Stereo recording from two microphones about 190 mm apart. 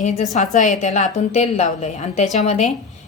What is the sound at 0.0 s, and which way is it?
A woman's voice, 40° left (ahead or behind).